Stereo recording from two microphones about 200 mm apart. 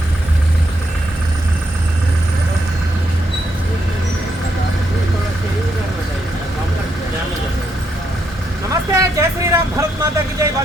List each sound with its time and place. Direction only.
8.7 s vehicle: 15° right (ahead or behind)